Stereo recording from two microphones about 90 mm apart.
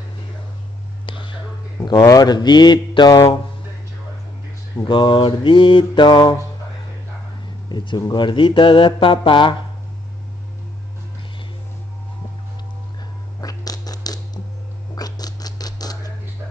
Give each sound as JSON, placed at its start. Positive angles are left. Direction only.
{"t": 1.0, "sound": "whispering", "side_deg": 65}
{"t": 1.9, "sound": "speech", "side_deg": 45}
{"t": 4.8, "sound": "speech", "side_deg": 65}
{"t": 7.7, "sound": "speech", "side_deg": 60}
{"t": 13.4, "sound": "a sound", "side_deg": 45}